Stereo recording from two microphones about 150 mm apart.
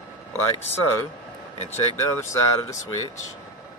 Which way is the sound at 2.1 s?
20° left (ahead or behind).